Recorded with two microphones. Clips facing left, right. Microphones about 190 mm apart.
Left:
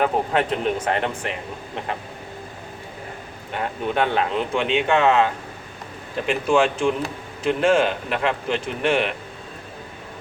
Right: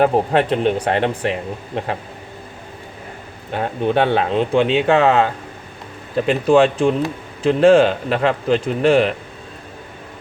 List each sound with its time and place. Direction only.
0.0 s speech: 35° right (ahead or behind)
3.5 s speech: 30° right (ahead or behind)